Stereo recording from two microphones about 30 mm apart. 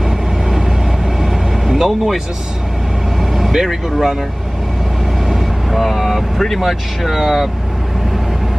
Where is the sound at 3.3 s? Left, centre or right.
Centre.